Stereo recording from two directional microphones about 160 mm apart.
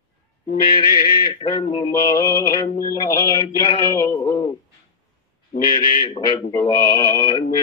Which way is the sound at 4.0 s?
20° left (ahead or behind).